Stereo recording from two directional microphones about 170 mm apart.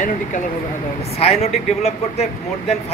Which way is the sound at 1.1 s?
40° left (ahead or behind).